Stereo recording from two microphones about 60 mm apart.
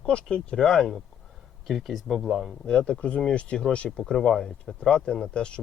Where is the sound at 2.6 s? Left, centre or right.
Centre.